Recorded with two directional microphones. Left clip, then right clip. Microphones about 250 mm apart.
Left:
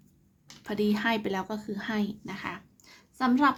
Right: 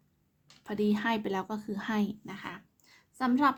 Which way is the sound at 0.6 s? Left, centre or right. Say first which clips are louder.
Left 2 dB; centre.